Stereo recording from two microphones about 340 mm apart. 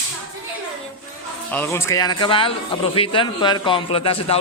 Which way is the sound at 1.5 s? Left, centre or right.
Centre.